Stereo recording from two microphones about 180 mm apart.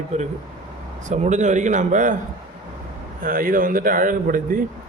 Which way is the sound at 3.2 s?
50° right (ahead or behind).